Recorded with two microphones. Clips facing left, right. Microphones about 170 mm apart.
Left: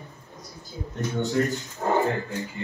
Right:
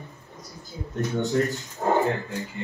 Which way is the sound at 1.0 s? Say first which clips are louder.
Even; centre (ahead or behind).